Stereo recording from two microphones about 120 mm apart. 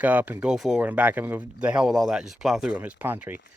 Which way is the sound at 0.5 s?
5° right (ahead or behind).